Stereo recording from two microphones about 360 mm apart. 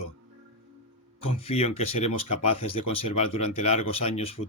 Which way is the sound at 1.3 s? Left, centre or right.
Centre.